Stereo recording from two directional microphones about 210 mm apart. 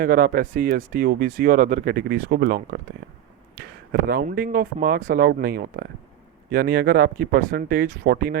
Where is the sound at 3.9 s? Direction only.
45° right (ahead or behind).